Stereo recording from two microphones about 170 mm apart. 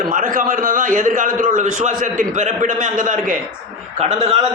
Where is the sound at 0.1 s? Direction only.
55° right (ahead or behind).